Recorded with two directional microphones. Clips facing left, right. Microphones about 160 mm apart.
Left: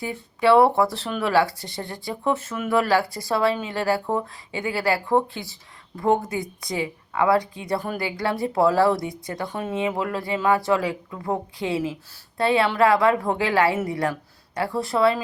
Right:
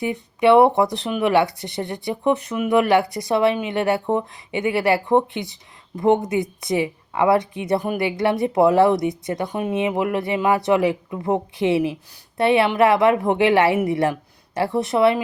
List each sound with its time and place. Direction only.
0.0 s speech: 20° right (ahead or behind)